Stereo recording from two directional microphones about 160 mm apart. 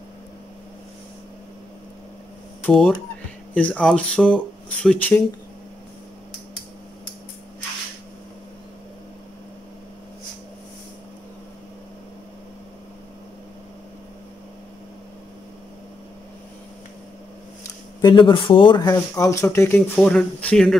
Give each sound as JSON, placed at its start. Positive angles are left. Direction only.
{"t": 2.6, "sound": "speech", "side_deg": 5}
{"t": 18.0, "sound": "speech", "side_deg": 30}
{"t": 20.0, "sound": "speech", "side_deg": 5}